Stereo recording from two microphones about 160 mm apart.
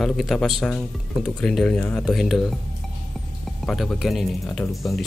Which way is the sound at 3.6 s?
Centre (ahead or behind).